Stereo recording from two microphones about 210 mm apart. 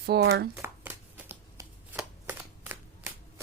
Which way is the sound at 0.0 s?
50° right (ahead or behind).